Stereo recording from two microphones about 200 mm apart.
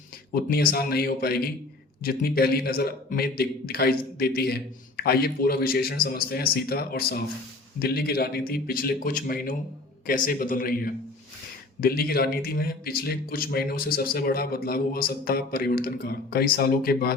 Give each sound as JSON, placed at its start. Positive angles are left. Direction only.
{"t": 0.5, "sound": "a man's voice", "side_deg": 50}